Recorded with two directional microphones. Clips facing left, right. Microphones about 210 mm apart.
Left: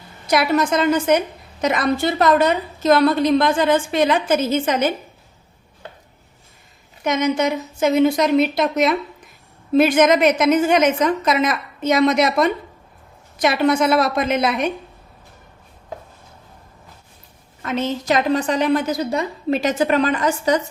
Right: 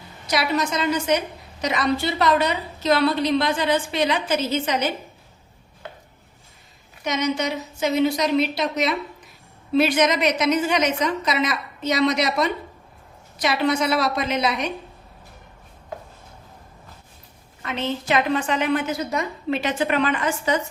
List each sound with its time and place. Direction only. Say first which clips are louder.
0.3 s a woman's voice: left 5 dB; 55° left (ahead or behind)
7.0 s a woman's voice: left 5 dB; 50° left (ahead or behind)
17.6 s a woman's voice: left 4 dB; 45° left (ahead or behind)